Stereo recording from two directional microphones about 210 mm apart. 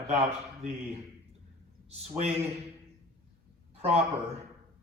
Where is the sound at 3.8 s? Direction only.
30° right (ahead or behind).